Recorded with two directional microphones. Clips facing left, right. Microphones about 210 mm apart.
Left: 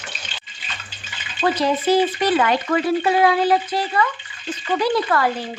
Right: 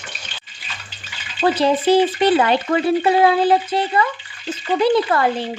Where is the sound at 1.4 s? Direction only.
30° right (ahead or behind).